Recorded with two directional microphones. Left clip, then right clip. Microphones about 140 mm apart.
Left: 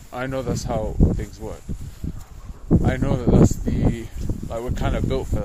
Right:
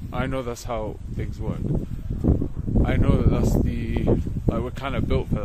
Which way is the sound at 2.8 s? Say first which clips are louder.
Even; 10° right (ahead or behind).